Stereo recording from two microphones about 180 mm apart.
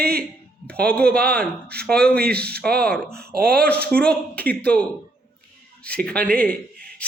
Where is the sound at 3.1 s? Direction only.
60° right (ahead or behind).